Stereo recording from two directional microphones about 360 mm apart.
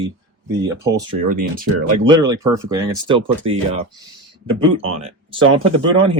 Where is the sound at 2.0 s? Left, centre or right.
Centre.